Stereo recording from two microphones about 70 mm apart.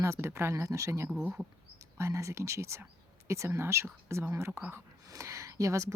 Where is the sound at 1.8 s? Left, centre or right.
Right.